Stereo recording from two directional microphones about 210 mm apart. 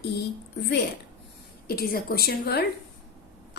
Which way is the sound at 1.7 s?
45° left (ahead or behind).